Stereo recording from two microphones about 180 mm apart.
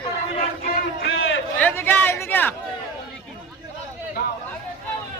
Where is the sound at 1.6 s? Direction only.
10° left (ahead or behind).